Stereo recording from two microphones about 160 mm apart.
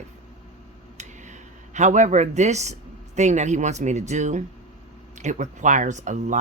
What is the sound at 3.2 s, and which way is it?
A man's voice, 45° right (ahead or behind).